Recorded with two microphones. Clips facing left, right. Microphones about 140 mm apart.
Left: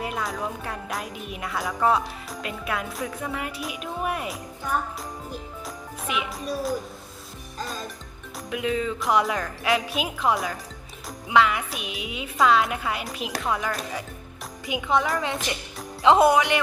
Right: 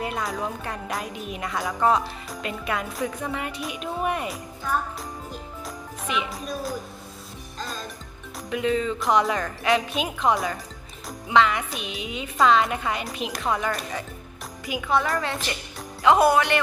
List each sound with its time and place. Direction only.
0.0 s jingle bell: centre (ahead or behind)
5.3 s speech: 5° left (ahead or behind)
8.4 s jingle bell: 5° left (ahead or behind)
14.7 s speech: 20° left (ahead or behind)